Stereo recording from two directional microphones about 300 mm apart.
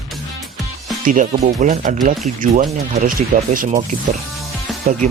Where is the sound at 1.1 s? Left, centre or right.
Right.